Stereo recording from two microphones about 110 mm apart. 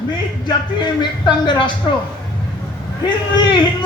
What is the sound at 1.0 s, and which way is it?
Speech, 45° left (ahead or behind).